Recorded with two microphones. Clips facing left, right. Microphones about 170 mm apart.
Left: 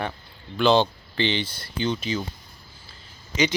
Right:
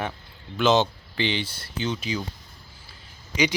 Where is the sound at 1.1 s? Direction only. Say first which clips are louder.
Left 2 dB; 5° right (ahead or behind).